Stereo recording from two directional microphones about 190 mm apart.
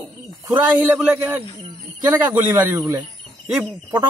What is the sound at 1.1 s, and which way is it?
A man's voice, 15° right (ahead or behind).